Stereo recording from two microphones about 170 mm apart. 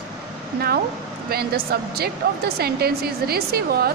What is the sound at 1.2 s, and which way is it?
A woman's voice, 65° right (ahead or behind).